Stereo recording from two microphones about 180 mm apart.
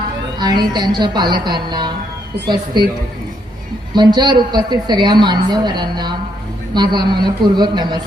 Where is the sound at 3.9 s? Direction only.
25° right (ahead or behind).